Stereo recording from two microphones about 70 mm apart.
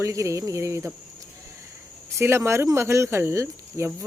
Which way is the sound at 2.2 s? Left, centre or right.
Right.